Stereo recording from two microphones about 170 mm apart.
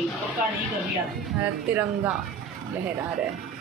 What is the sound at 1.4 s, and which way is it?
Speech, 10° right (ahead or behind).